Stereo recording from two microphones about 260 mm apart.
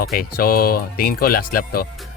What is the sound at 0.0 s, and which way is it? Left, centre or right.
Speech, left.